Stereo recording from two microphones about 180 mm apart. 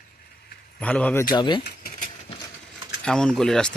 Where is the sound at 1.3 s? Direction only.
25° left (ahead or behind).